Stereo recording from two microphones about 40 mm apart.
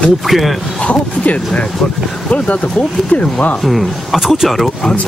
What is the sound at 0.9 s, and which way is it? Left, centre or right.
Speech, left.